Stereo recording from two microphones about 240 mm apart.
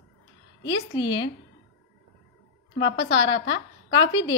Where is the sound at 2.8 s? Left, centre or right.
Centre.